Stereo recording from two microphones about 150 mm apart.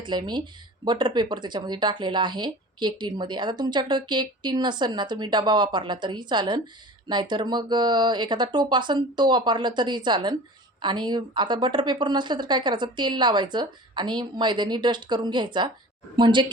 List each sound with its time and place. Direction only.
0.0 s a woman's voice: 30° right (ahead or behind)